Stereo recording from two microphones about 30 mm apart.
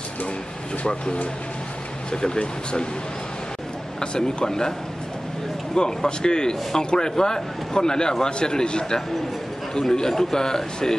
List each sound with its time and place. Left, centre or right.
4.0 s speech: left
4.5 s speech: centre
5.8 s a man's voice: left